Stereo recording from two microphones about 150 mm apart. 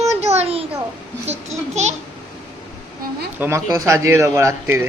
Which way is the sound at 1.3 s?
50° right (ahead or behind).